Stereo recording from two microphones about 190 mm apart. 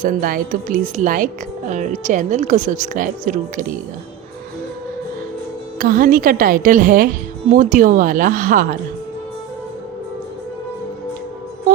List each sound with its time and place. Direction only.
0.0 s a woman's voice: 45° right (ahead or behind)
5.8 s a woman's voice: 45° right (ahead or behind)